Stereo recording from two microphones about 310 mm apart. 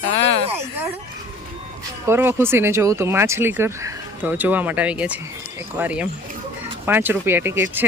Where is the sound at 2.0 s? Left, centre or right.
Centre.